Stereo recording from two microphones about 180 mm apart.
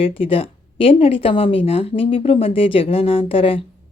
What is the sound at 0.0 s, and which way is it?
Speech, 30° left (ahead or behind).